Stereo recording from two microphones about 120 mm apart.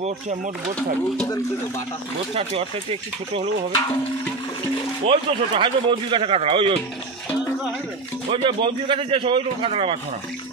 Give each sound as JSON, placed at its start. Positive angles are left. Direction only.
{"t": 2.3, "sound": "speech", "side_deg": -55}
{"t": 5.0, "sound": "speech", "side_deg": -45}
{"t": 8.3, "sound": "speech", "side_deg": -45}